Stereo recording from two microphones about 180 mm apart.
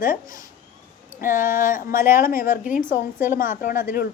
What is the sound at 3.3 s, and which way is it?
Speech, 50° left (ahead or behind).